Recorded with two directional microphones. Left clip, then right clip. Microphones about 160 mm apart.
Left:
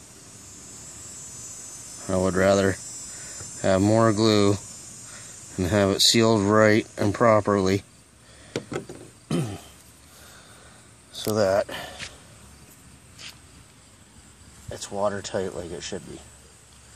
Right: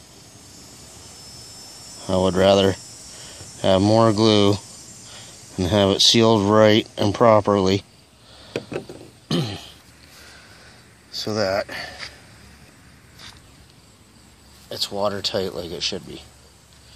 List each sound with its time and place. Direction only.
2.0 s speech: 5° right (ahead or behind)
5.7 s speech: 5° right (ahead or behind)
9.3 s burping: centre (ahead or behind)
11.3 s speech: 25° left (ahead or behind)
14.7 s speech: 10° right (ahead or behind)